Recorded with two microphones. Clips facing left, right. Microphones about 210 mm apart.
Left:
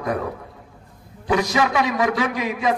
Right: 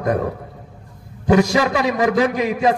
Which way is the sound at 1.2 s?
40° right (ahead or behind).